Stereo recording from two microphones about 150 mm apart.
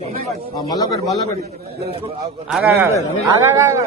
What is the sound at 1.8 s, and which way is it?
Speech, 40° right (ahead or behind).